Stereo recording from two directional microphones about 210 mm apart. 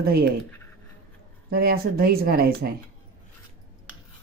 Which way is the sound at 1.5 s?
45° right (ahead or behind).